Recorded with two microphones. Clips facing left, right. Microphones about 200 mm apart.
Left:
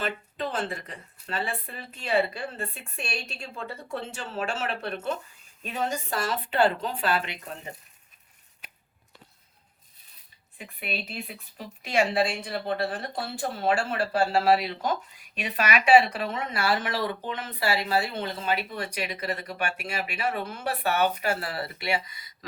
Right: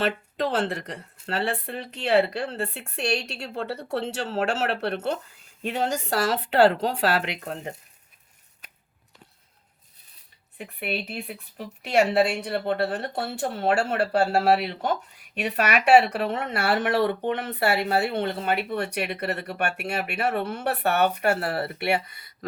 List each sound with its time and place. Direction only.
0.0 s speech: 80° right
10.6 s speech: 60° right (ahead or behind)